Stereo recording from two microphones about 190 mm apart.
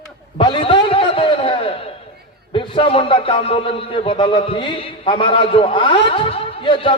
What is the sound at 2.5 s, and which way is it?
A man's voice, 25° left (ahead or behind).